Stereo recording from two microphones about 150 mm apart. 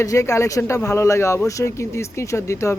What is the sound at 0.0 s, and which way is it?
Speech, 20° left (ahead or behind).